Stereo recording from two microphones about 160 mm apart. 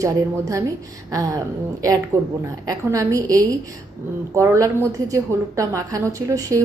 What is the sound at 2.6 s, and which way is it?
A woman's voice, 20° right (ahead or behind).